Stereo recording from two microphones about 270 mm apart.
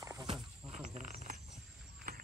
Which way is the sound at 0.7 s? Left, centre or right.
Right.